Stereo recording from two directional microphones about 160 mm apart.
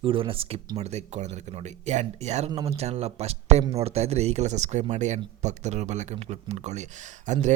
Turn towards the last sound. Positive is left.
turn(degrees=-50)  # may be behind; listen again after turning